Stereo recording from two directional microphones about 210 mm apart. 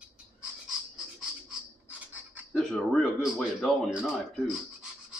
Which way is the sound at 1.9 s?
5° right (ahead or behind).